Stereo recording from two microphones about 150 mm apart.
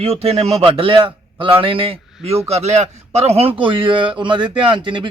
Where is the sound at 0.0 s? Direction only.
40° right (ahead or behind).